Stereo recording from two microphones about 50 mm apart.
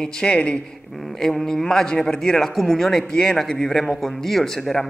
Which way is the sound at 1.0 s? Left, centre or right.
Centre.